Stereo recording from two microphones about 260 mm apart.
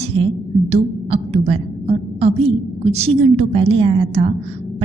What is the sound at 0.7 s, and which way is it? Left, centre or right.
A woman's voice, right.